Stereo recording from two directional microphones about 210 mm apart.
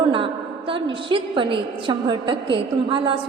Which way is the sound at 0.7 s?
25° right (ahead or behind).